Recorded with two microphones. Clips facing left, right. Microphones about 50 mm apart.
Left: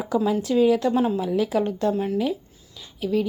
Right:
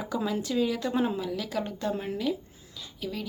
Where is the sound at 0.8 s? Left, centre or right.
Centre.